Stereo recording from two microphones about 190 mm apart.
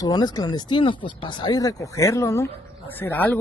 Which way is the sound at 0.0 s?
20° left (ahead or behind).